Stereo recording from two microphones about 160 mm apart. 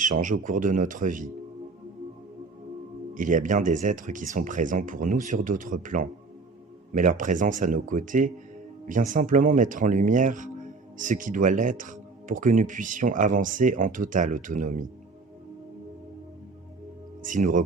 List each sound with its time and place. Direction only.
0.0 s speech: 55° right (ahead or behind)
3.2 s speech: 55° right (ahead or behind)
17.2 s speech: 55° right (ahead or behind)